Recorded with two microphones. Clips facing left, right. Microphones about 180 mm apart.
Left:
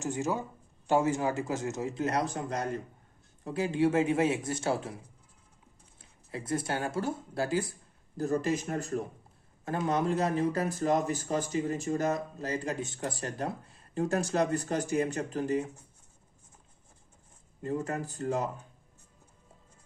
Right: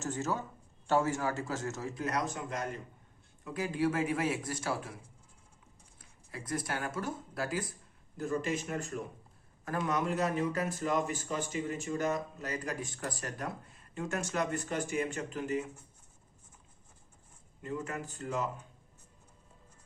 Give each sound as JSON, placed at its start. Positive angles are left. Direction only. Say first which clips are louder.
{"t": 0.0, "sound": "a man's voice", "louder": "left 3 dB", "side_deg": 15}
{"t": 6.0, "sound": "speech", "louder": "left 6 dB", "side_deg": 25}
{"t": 8.1, "sound": "speech", "louder": "left 4 dB", "side_deg": 40}
{"t": 17.6, "sound": "speech", "louder": "left 5 dB", "side_deg": 35}